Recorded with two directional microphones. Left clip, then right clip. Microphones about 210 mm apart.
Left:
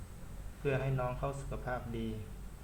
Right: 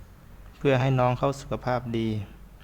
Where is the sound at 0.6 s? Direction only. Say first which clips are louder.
Right 12 dB; 55° right (ahead or behind).